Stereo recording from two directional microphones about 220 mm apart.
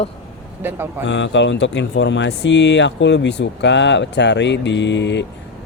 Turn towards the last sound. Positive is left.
turn(degrees=55)  # may be behind; listen again after turning